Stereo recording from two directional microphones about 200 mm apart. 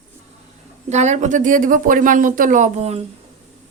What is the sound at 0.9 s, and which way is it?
Speech, 35° right (ahead or behind).